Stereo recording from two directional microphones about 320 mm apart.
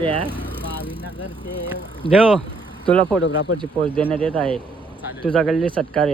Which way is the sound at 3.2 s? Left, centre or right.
Left.